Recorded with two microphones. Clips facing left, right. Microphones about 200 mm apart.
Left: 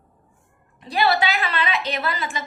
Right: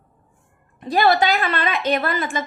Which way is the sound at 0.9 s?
45° right (ahead or behind).